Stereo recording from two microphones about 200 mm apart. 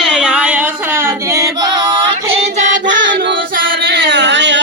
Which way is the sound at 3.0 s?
65° right (ahead or behind).